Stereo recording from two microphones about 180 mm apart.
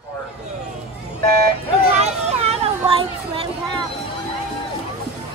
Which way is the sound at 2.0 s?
35° right (ahead or behind).